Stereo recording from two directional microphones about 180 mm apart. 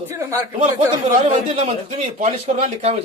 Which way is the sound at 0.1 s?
20° right (ahead or behind).